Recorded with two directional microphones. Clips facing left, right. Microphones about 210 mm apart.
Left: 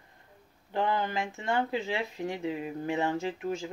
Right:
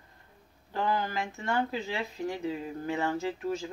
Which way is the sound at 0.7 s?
20° left (ahead or behind).